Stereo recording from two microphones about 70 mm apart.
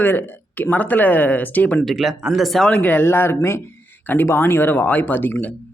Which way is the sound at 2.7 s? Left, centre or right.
Left.